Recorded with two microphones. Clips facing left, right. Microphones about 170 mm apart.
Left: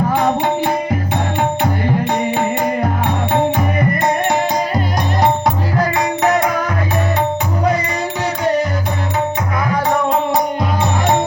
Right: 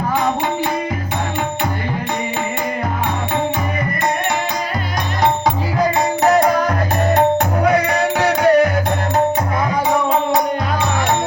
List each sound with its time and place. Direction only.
6.2 s music: 35° right (ahead or behind)
7.2 s music: 60° right (ahead or behind)